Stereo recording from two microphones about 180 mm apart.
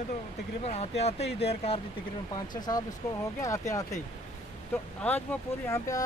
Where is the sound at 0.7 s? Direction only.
35° left (ahead or behind).